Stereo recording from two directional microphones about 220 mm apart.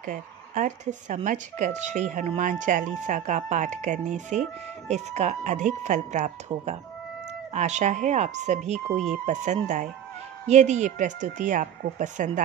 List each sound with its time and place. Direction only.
0.0 s speech: 35° right (ahead or behind)